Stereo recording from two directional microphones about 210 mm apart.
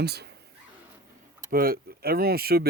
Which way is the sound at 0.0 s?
50° right (ahead or behind).